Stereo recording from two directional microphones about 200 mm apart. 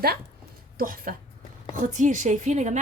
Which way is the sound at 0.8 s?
45° right (ahead or behind).